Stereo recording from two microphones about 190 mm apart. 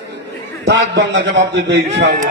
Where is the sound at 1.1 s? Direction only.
75° right (ahead or behind).